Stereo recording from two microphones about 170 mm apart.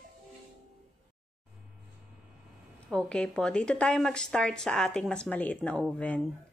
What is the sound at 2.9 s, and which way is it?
Speech, 5° left (ahead or behind).